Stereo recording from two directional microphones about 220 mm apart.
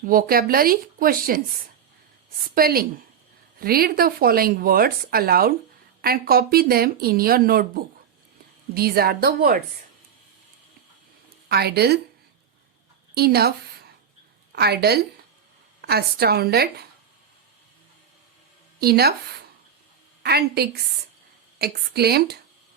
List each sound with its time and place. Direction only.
0.0 s a woman's voice: 40° right (ahead or behind)
2.6 s speech: 45° right (ahead or behind)
8.7 s speech: 45° right (ahead or behind)
11.4 s speech: 45° right (ahead or behind)
13.1 s speech: 45° right (ahead or behind)
14.5 s speech: 45° right (ahead or behind)
18.8 s speech: 45° right (ahead or behind)
20.2 s speech: 45° right (ahead or behind)